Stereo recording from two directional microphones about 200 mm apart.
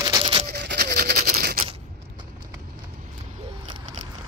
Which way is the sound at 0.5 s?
55° right (ahead or behind).